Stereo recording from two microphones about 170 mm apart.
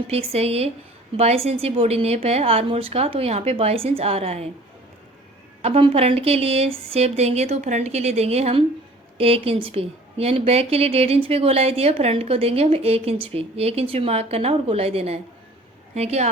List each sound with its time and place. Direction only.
0.1 s a woman's voice: 35° right (ahead or behind)
5.6 s a woman's voice: 35° right (ahead or behind)